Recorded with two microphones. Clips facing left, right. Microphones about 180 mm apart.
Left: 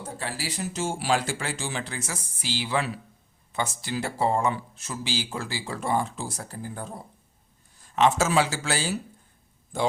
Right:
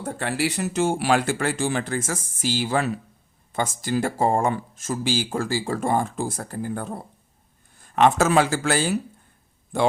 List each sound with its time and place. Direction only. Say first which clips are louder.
0.0 s speech: right 8 dB; 65° right (ahead or behind)